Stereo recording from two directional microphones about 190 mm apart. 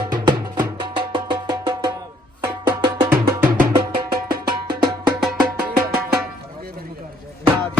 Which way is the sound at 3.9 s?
50° right (ahead or behind).